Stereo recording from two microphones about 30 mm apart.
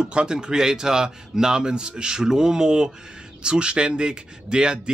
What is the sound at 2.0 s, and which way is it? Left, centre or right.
Speech, centre.